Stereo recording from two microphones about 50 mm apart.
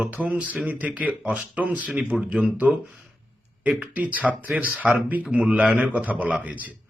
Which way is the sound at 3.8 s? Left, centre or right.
Right.